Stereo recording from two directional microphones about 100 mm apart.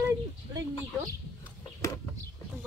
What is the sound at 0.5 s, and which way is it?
Chicken, 35° right (ahead or behind).